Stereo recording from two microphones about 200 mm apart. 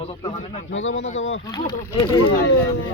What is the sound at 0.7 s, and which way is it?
Speech, 75° left (ahead or behind).